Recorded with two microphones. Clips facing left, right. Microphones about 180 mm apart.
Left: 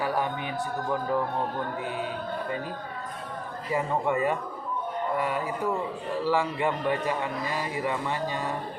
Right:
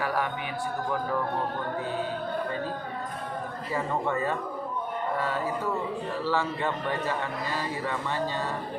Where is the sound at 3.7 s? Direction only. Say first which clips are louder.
Left 3 dB; 15° left (ahead or behind).